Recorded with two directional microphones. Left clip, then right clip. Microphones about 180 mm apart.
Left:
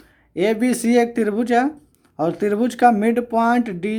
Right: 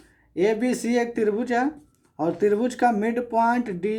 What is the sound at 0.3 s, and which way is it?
Speech, 40° left (ahead or behind).